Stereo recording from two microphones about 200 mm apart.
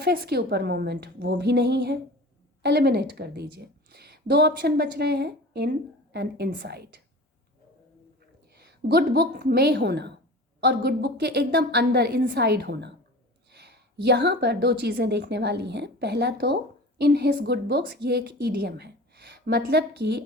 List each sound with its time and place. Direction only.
0.0 s a woman's voice: 55° right (ahead or behind)
8.5 s a woman's voice: 55° right (ahead or behind)